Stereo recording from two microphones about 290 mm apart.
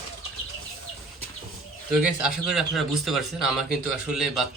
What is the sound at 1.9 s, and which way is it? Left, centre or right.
Speech, centre.